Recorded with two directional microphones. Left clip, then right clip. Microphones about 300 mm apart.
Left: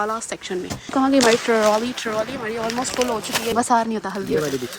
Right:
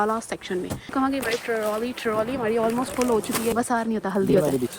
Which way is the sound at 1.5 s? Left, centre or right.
Left.